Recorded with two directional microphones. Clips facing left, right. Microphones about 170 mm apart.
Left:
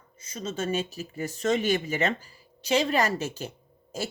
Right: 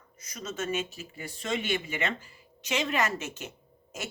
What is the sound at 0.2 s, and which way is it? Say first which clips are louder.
A woman's voice: left 4 dB; 30° left (ahead or behind).